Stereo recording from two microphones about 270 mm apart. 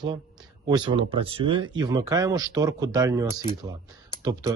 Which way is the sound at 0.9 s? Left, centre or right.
Centre.